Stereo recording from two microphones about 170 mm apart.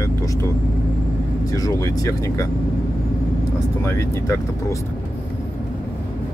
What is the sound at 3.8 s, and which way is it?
Speech, 15° left (ahead or behind).